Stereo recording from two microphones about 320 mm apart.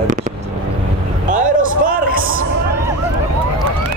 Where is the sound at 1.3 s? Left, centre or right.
Right.